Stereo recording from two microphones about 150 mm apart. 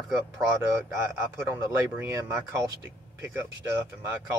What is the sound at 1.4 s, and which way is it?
Speech, 15° right (ahead or behind).